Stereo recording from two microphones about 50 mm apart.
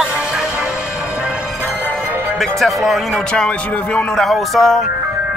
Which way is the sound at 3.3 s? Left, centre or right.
Left.